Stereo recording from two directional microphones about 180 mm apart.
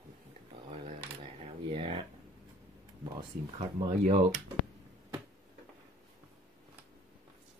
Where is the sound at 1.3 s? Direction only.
30° right (ahead or behind).